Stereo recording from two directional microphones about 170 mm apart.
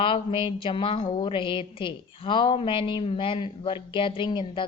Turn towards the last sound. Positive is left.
turn(degrees=30)  # may be behind; listen again after turning